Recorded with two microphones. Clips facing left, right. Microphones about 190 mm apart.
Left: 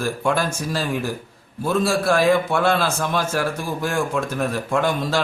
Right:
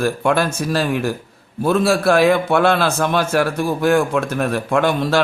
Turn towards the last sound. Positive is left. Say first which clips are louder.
# right 4 dB
turn(degrees=-70)  # may be behind; listen again after turning